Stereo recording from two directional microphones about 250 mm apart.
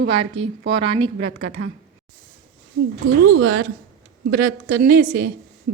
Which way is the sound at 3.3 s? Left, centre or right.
Right.